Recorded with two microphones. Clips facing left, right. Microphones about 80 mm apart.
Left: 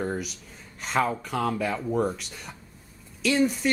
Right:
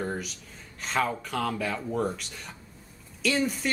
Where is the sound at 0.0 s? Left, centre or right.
Centre.